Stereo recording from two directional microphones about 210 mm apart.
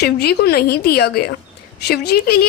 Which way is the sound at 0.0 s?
50° left (ahead or behind).